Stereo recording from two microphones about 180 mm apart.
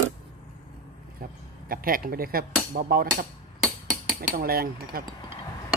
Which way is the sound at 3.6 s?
5° right (ahead or behind).